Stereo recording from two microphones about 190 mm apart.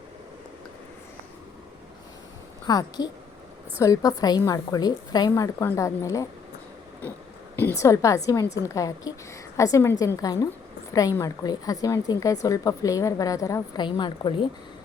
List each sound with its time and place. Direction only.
2.6 s a woman's voice: 20° left (ahead or behind)
7.5 s a woman's voice: 15° left (ahead or behind)